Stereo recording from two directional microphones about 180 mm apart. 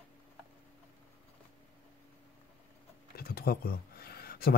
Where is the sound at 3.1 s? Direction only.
55° left (ahead or behind).